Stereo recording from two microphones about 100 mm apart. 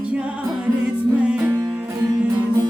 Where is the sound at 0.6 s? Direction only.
10° right (ahead or behind).